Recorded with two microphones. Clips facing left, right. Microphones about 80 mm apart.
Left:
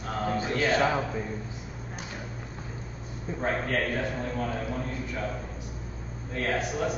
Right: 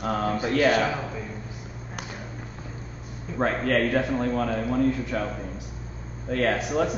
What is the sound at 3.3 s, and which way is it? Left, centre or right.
A man's voice, right.